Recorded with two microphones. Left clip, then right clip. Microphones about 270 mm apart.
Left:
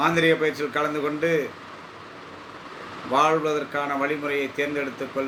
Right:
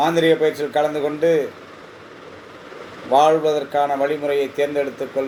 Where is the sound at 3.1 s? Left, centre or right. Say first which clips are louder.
Right 6 dB; centre.